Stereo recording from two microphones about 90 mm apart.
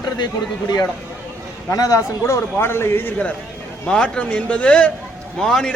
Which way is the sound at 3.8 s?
10° left (ahead or behind).